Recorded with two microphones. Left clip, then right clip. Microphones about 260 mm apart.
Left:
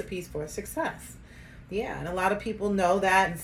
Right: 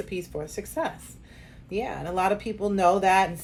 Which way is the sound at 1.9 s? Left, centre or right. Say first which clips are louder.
Right 3 dB; centre.